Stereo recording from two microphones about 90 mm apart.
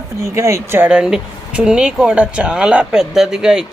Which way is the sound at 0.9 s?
10° right (ahead or behind).